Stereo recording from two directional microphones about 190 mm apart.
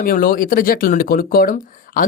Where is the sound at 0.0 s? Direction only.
50° left (ahead or behind).